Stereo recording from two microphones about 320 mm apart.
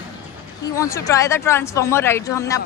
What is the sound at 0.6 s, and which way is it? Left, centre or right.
Speech, centre.